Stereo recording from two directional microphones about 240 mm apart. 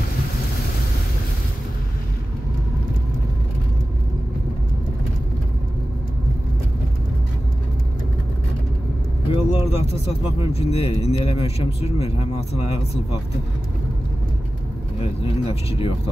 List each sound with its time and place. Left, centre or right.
9.3 s vehicle: left
10.5 s speech: left
15.0 s speech: left